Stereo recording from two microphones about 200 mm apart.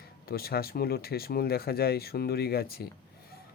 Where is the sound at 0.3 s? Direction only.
50° left (ahead or behind).